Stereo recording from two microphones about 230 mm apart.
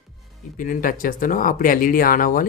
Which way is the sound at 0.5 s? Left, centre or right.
Left.